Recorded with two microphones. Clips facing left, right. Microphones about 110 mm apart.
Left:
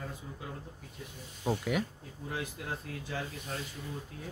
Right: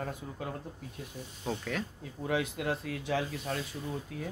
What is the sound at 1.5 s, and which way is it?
Speech, 10° left (ahead or behind).